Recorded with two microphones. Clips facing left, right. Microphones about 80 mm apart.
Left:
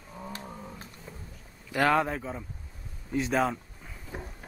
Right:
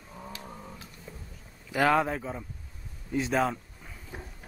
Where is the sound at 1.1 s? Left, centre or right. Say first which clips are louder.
Right 1 dB; centre.